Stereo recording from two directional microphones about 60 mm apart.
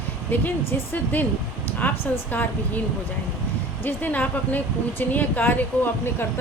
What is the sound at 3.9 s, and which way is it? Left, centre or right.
A woman's voice, left.